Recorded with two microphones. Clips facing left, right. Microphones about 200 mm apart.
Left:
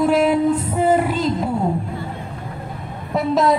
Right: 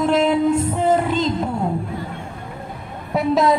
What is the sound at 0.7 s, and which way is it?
Music, 10° left (ahead or behind).